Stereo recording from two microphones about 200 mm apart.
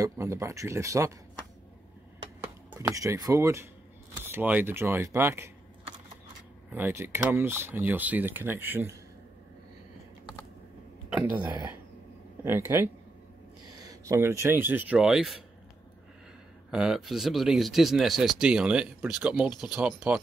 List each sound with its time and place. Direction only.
0.0 s speech: 15° right (ahead or behind)
2.4 s speech: 15° right (ahead or behind)
6.7 s speech: 10° right (ahead or behind)
11.1 s speech: 15° right (ahead or behind)
16.7 s speech: 5° right (ahead or behind)